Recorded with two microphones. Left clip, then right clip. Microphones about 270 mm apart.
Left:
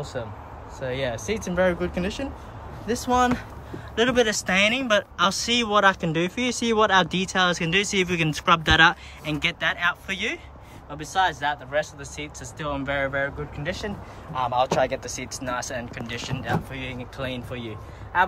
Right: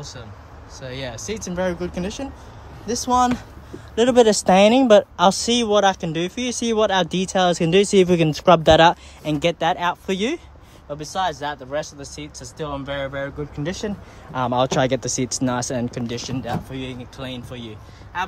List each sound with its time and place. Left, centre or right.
0.8 s speech: centre